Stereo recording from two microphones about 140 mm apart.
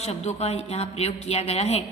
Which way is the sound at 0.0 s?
50° left (ahead or behind).